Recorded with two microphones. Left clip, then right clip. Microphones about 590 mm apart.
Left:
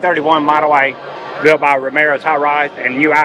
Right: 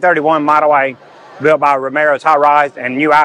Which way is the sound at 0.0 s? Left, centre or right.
Right.